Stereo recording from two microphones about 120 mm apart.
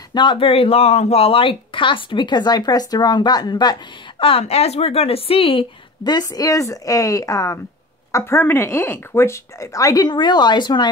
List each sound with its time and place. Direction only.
0.1 s speech: 40° left (ahead or behind)
4.2 s a woman's voice: 50° left (ahead or behind); by 10.0 s 25° left (ahead or behind)
10.0 s speech: 40° left (ahead or behind)